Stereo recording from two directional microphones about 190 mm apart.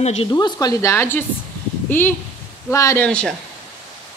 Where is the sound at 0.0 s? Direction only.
35° left (ahead or behind).